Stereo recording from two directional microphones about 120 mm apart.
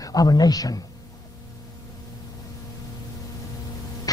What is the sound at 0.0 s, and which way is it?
Speech, 30° left (ahead or behind).